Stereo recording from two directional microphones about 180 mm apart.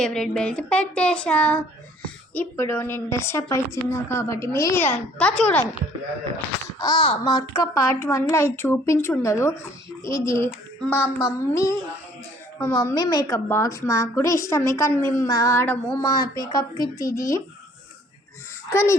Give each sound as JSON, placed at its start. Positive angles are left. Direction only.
{"t": 0.0, "sound": "a woman's voice", "side_deg": 5}
{"t": 6.7, "sound": "a woman's voice", "side_deg": 25}
{"t": 11.0, "sound": "a child's voice", "side_deg": -5}
{"t": 11.3, "sound": "a woman's voice", "side_deg": 15}
{"t": 18.7, "sound": "a woman's voice", "side_deg": 15}